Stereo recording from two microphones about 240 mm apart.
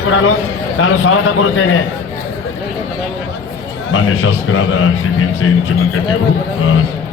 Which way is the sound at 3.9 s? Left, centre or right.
Left.